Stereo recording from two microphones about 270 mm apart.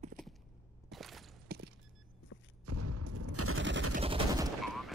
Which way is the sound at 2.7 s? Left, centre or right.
Right.